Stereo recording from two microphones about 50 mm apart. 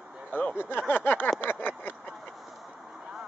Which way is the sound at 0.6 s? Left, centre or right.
Left.